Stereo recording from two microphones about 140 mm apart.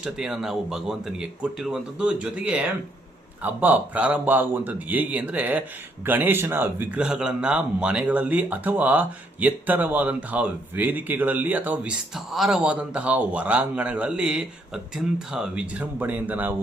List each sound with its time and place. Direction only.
0.0 s a man's voice: 5° right (ahead or behind)